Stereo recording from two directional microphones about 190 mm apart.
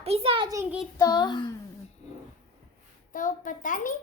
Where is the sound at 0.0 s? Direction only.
30° right (ahead or behind).